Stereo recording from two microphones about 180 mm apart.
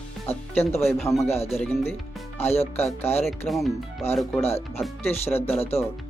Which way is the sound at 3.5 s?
Centre (ahead or behind).